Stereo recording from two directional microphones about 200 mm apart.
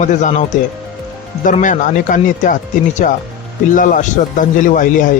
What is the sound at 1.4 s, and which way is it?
Speech, 40° left (ahead or behind).